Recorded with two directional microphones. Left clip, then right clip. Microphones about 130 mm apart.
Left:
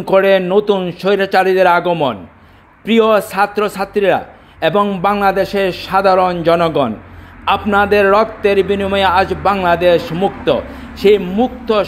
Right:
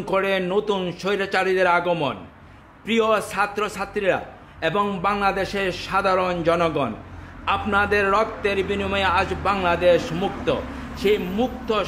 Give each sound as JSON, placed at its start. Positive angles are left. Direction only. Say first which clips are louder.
{"t": 0.0, "sound": "a man's voice", "louder": "left 11 dB", "side_deg": 45}